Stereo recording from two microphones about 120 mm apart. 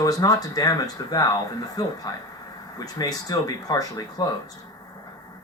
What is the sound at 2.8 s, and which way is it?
Speech, 30° left (ahead or behind).